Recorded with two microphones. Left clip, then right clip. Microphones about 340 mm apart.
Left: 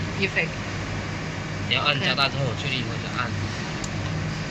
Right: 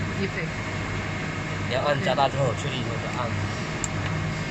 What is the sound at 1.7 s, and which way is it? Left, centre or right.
Speech, centre.